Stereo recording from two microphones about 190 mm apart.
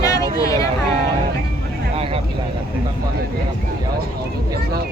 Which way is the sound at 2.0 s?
30° right (ahead or behind).